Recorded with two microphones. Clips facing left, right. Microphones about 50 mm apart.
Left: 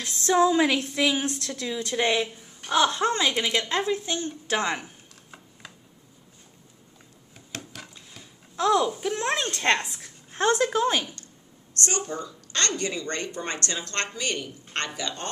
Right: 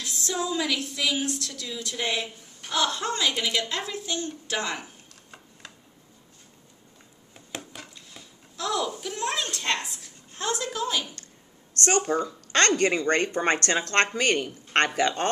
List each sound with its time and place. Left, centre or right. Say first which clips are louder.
0.0 s a woman's voice: left 9 dB; left
3.3 s a woman's voice: left 1 dB; centre
3.5 s a woman's voice: left 4 dB; left
7.8 s a sound: even; centre
8.5 s a woman's voice: left 6 dB; left
9.3 s a woman's voice: left 5 dB; left
11.8 s speech: right 6 dB; right